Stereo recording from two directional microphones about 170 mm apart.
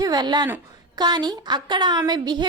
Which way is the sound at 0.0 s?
25° right (ahead or behind).